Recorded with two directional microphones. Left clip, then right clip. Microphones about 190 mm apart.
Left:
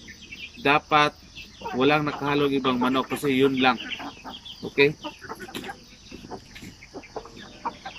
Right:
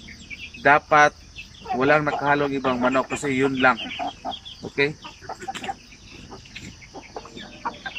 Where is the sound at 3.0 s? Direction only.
20° left (ahead or behind).